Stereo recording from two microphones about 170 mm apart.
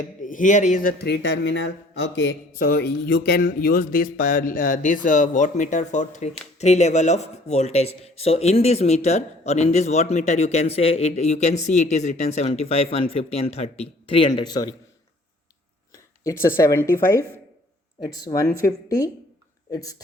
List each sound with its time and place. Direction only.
0.2 s a man's voice: 50° left (ahead or behind)
1.0 s speech: 85° left; by 14.7 s 25° left (ahead or behind)
15.9 s speech: 15° left (ahead or behind)
18.3 s speech: 30° left (ahead or behind)
18.9 s speech: 20° left (ahead or behind)